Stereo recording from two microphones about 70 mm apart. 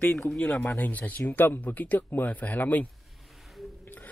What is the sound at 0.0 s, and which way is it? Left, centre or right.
Speech, centre.